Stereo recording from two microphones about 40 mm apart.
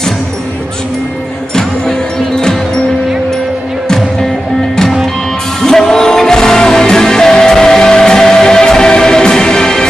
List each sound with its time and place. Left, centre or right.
1.5 s music: centre
5.6 s music: centre